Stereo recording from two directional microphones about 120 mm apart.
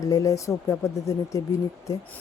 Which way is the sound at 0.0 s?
30° left (ahead or behind).